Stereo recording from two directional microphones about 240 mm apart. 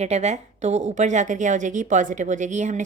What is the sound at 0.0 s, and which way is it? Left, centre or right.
A woman's voice, right.